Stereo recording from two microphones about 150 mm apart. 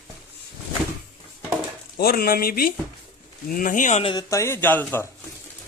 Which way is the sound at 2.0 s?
90° left.